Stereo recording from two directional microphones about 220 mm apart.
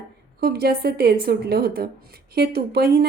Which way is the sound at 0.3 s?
45° right (ahead or behind).